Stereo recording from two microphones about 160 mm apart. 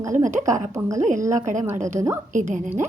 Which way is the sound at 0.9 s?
50° right (ahead or behind).